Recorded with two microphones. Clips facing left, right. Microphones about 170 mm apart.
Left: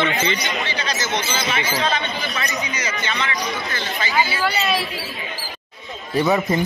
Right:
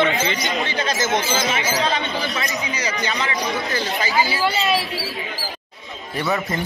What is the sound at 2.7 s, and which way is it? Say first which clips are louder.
Speech: right 2 dB; 35° right (ahead or behind).